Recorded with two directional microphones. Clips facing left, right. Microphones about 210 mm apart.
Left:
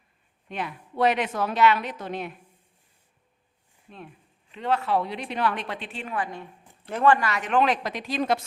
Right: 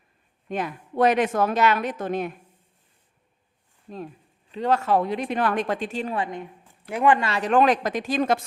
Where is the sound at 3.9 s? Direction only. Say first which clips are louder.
Right 8 dB; 40° right (ahead or behind).